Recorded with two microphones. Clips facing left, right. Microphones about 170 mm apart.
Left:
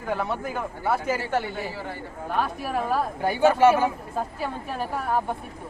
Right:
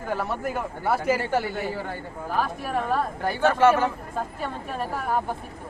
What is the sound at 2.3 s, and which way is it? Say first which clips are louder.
Speech: even; centre (ahead or behind).